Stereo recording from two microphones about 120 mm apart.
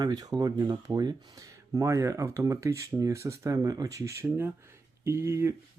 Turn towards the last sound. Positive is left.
turn(degrees=-25)  # may be behind; listen again after turning